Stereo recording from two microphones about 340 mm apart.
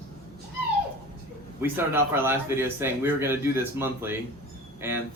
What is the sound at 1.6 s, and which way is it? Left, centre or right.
A man's voice, centre.